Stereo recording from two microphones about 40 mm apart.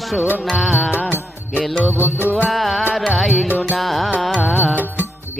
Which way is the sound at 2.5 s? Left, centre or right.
Centre.